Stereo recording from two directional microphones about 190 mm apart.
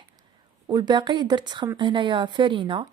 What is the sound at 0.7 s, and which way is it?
A woman's voice, 20° right (ahead or behind).